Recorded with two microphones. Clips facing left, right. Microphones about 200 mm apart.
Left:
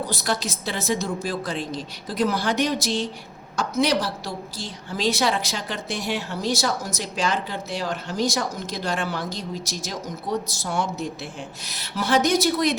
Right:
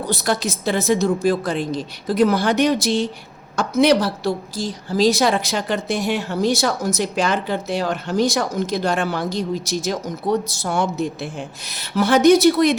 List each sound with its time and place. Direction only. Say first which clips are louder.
0.1 s a woman's voice: right 5 dB; 55° right (ahead or behind)
4.6 s a woman's voice: right 8 dB; 40° right (ahead or behind); by 12.7 s 60° right (ahead or behind)